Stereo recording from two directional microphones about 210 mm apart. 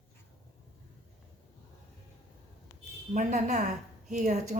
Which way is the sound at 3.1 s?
35° right (ahead or behind).